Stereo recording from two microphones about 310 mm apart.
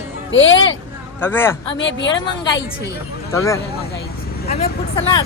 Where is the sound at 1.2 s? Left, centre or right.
Centre.